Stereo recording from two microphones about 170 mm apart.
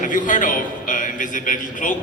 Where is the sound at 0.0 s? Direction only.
50° left (ahead or behind).